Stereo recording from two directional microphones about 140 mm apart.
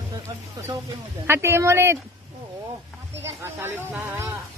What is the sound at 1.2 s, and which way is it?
Speech, 20° right (ahead or behind).